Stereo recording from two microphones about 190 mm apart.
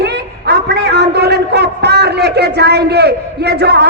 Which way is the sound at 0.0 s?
60° right (ahead or behind).